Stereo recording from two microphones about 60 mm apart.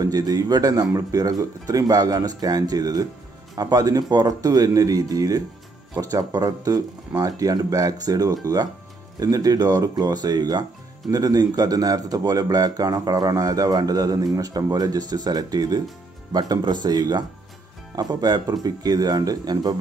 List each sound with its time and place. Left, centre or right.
0.0 s a man's voice: right
18.5 s a man's voice: right